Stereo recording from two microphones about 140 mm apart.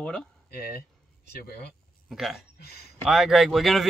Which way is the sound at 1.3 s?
90° left.